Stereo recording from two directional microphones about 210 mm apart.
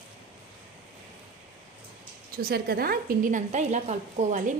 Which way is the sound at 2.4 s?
45° right (ahead or behind).